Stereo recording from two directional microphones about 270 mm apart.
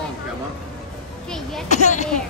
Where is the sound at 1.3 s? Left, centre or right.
Centre.